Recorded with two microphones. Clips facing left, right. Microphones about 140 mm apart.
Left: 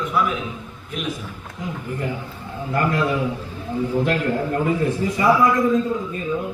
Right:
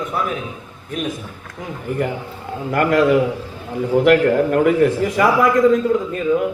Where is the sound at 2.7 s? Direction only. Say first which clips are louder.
Right 7 dB; 90° right.